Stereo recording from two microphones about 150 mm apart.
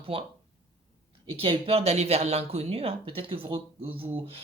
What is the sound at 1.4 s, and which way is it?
Speech, 40° right (ahead or behind).